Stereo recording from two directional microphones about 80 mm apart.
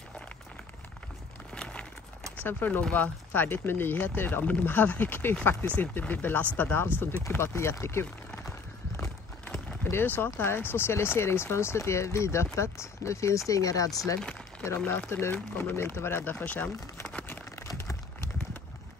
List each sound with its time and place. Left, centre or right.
1.5 s a sound: centre
2.3 s speech: left
8.5 s clip-clop: left
9.8 s speech: left
14.9 s speech: left
15.7 s speech: left
17.7 s a sound: left